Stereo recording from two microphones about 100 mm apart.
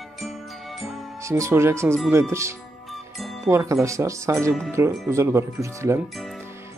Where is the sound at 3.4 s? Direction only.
30° right (ahead or behind).